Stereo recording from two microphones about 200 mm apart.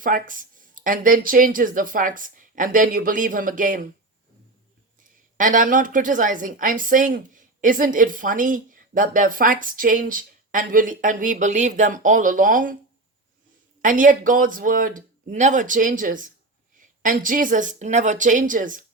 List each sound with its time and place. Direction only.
0.0 s speech: 40° right (ahead or behind)
5.4 s a woman's voice: 40° right (ahead or behind)
13.8 s a woman's voice: 40° right (ahead or behind)